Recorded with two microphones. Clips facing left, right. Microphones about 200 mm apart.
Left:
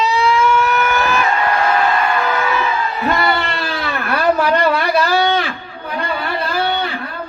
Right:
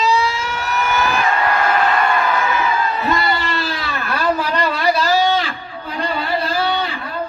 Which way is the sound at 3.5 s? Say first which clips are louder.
Left 1 dB; 60° left (ahead or behind).